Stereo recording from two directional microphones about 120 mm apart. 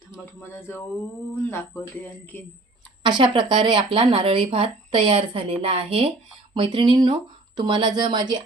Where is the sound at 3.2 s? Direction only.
40° right (ahead or behind).